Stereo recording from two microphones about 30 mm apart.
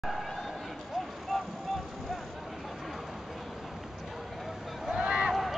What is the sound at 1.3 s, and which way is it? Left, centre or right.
Vehicle, centre.